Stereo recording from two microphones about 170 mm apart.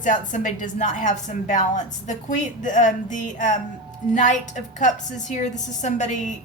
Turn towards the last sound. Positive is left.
turn(degrees=45)  # may be behind; listen again after turning